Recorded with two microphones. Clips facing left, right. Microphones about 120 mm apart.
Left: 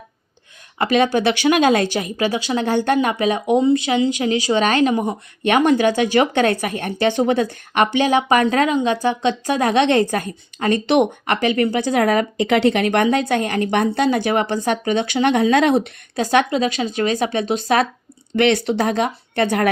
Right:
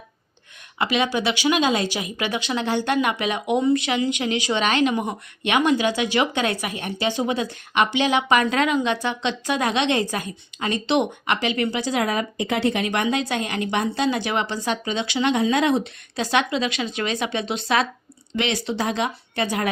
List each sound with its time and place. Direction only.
0.8 s speech: 45° left (ahead or behind); by 2.6 s 30° left (ahead or behind)
2.6 s speech: 45° left (ahead or behind); by 15.9 s 70° left (ahead or behind)
16.1 s speech: 45° left (ahead or behind)
18.3 s speech: 60° left (ahead or behind)